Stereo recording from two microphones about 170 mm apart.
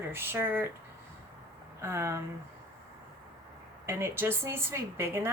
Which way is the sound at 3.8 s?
15° right (ahead or behind).